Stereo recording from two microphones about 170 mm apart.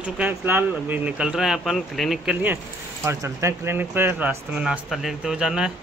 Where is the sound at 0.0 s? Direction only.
10° right (ahead or behind).